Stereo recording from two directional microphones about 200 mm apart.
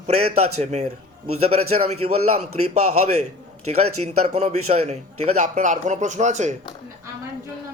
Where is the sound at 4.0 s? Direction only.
35° right (ahead or behind).